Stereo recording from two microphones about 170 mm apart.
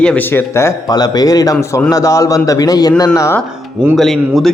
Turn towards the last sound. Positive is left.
turn(degrees=0)  # may be behind; listen again after turning